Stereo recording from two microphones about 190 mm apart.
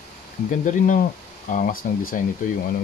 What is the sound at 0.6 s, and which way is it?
Speech, 45° left (ahead or behind).